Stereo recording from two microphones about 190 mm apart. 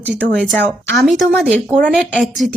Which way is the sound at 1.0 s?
Centre (ahead or behind).